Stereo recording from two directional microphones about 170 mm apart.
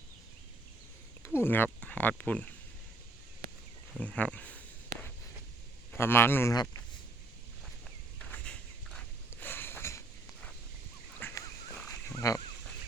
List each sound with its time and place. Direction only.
1.2 s speech: 15° left (ahead or behind)
4.0 s speech: 5° left (ahead or behind)
6.0 s a man's voice: 15° left (ahead or behind)
8.2 s a sound: 5° left (ahead or behind)
11.2 s fowl: 10° left (ahead or behind)